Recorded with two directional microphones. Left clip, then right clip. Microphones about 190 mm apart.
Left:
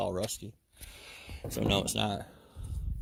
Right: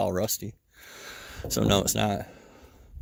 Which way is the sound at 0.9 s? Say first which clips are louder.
Right 7 dB; 65° right (ahead or behind).